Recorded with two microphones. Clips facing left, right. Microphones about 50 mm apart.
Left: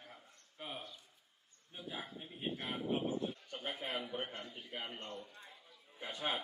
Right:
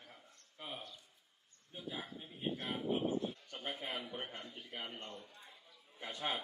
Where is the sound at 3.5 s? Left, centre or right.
Left.